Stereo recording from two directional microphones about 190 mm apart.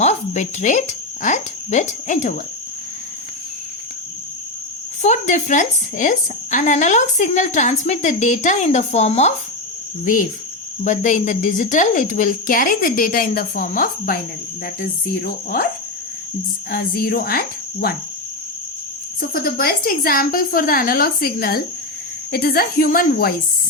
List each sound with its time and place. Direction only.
0.0 s speech: 40° left (ahead or behind)
5.0 s a woman's voice: 40° left (ahead or behind)
16.7 s a woman's voice: 50° left (ahead or behind)
19.3 s a woman's voice: 50° left (ahead or behind)